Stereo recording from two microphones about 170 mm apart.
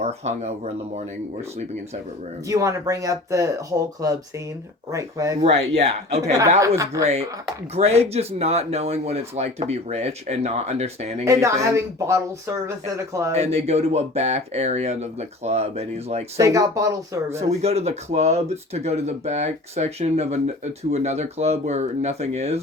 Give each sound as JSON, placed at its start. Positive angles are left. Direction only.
{"t": 0.0, "sound": "speech", "side_deg": -40}
{"t": 2.5, "sound": "speech", "side_deg": -20}
{"t": 5.4, "sound": "speech", "side_deg": -40}
{"t": 6.6, "sound": "speech", "side_deg": -15}
{"t": 7.8, "sound": "speech", "side_deg": -40}
{"t": 11.3, "sound": "speech", "side_deg": -15}
{"t": 13.3, "sound": "speech", "side_deg": -40}
{"t": 16.4, "sound": "speech", "side_deg": -20}
{"t": 17.6, "sound": "speech", "side_deg": -40}